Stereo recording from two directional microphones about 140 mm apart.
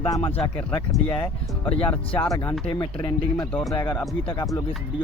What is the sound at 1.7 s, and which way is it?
Speech, 40° left (ahead or behind).